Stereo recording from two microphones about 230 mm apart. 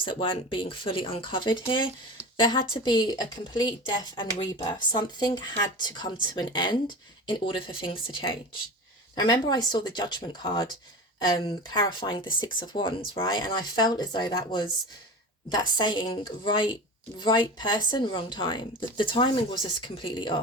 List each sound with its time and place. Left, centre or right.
0.0 s a woman's voice: left